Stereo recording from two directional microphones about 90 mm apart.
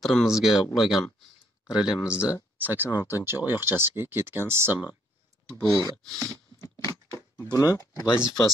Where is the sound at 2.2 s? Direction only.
40° left (ahead or behind).